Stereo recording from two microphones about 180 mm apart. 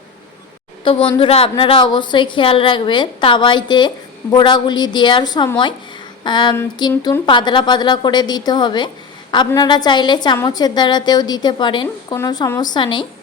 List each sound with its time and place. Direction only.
1.2 s a woman's voice: 30° left (ahead or behind)